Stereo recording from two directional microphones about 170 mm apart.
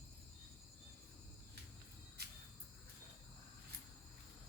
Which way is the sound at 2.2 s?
70° right (ahead or behind).